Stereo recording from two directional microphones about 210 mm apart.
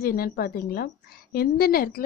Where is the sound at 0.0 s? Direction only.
45° left (ahead or behind).